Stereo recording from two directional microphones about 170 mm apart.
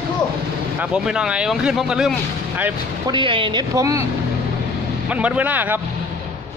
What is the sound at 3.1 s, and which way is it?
Speech, 30° right (ahead or behind).